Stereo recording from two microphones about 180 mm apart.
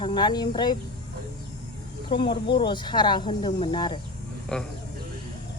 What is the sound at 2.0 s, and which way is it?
Speech, 25° left (ahead or behind).